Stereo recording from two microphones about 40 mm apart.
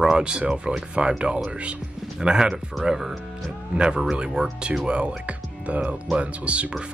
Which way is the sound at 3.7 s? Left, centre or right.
Right.